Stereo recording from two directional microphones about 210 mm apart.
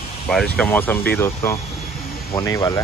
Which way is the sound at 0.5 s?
10° left (ahead or behind).